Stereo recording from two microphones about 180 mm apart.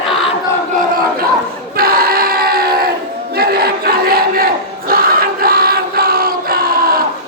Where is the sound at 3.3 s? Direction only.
60° right (ahead or behind).